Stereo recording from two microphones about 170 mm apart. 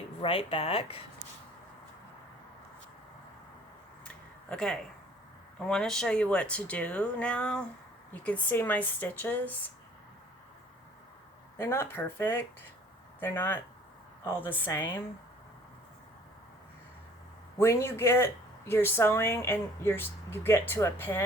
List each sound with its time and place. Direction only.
0.2 s speech: 35° left (ahead or behind)
4.0 s a sound: 5° left (ahead or behind)
5.5 s speech: 5° left (ahead or behind)
11.5 s speech: 15° left (ahead or behind)
17.6 s speech: 15° left (ahead or behind)